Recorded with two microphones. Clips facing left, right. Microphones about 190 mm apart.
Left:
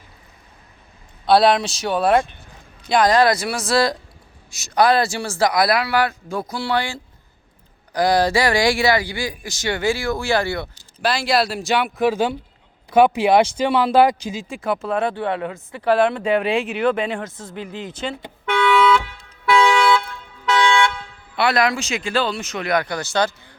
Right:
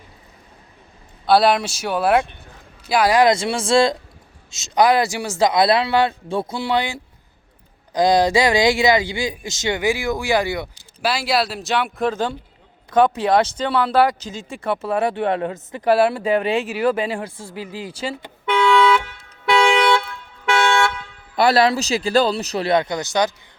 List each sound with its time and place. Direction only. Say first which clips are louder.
1.3 s speech: left 1 dB; 5° right (ahead or behind)
3.3 s speech: right 3 dB; 25° right (ahead or behind); by 14.4 s 10° left (ahead or behind)
14.4 s speech: right 1 dB; centre (ahead or behind)
15.5 s speech: even; 15° right (ahead or behind)
19.5 s toot: even; 25° right (ahead or behind)
21.3 s speech: right 3 dB; 35° right (ahead or behind); by 23.3 s 15° right (ahead or behind)